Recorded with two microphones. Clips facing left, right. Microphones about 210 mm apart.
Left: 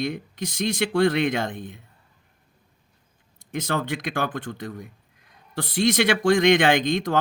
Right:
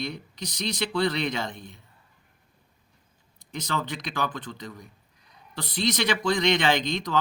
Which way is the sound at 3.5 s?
55° left (ahead or behind).